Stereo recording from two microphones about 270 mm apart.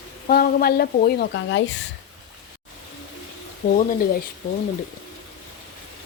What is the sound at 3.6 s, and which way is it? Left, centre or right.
Speech, left.